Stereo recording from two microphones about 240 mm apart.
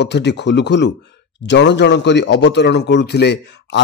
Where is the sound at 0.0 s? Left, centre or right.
Left.